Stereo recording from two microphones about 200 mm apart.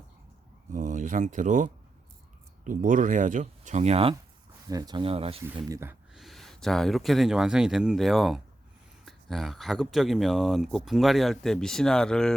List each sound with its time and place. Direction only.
0.7 s speech: 40° right (ahead or behind)
4.7 s speech: 20° right (ahead or behind)
5.6 s speech: 15° right (ahead or behind)
6.1 s speech: centre (ahead or behind)